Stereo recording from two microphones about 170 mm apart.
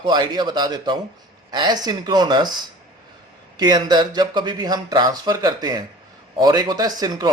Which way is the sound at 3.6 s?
25° right (ahead or behind).